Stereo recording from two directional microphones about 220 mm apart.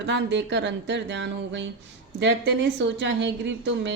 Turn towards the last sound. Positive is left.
turn(degrees=-55)  # may be behind; listen again after turning